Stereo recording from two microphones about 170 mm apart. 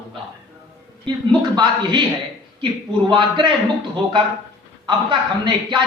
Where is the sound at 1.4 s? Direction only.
25° right (ahead or behind).